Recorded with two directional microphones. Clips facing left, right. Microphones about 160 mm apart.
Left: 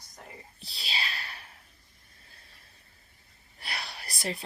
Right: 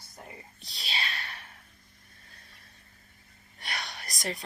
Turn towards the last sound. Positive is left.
turn(degrees=30)  # may be behind; listen again after turning